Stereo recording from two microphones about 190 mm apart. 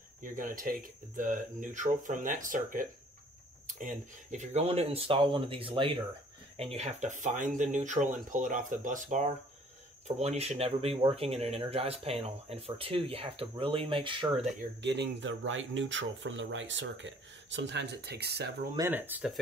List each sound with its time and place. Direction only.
0.2 s speech: 45° right (ahead or behind); by 14.5 s 25° right (ahead or behind)
14.6 s speech: 65° right (ahead or behind)
18.8 s speech: 10° right (ahead or behind)